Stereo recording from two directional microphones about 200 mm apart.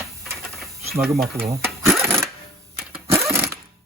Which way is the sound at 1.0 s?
Centre (ahead or behind).